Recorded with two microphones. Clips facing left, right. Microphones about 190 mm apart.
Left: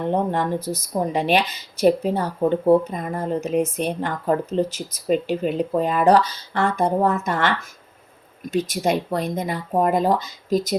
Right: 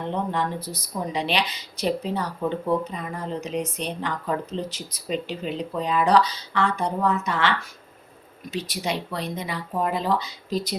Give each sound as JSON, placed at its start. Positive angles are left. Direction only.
{"t": 0.1, "sound": "speech", "side_deg": 45}